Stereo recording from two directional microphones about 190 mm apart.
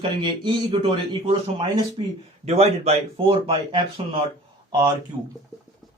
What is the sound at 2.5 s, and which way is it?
Speech, 35° right (ahead or behind).